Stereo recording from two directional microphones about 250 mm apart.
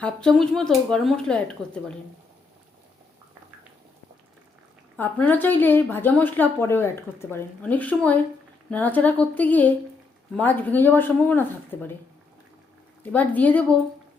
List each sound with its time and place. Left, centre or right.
0.0 s speech: centre
4.9 s a woman's voice: centre
13.0 s speech: centre